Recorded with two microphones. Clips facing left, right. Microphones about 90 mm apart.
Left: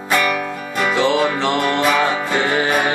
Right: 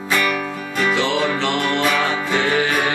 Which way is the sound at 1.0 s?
40° left (ahead or behind).